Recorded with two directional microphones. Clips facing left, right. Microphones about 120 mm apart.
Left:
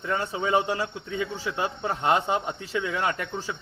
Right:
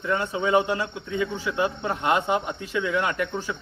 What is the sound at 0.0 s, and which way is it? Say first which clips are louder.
Speech: right 3 dB; 35° left (ahead or behind).